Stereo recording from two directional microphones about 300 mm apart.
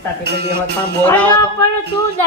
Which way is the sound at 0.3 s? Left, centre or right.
Right.